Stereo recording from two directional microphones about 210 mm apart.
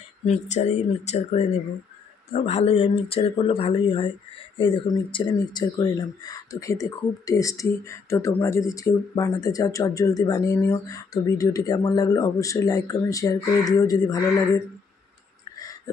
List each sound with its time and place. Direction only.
0.3 s speech: 30° left (ahead or behind); by 14.2 s 15° left (ahead or behind)